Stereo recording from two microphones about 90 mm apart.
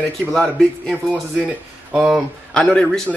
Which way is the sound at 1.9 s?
5° right (ahead or behind).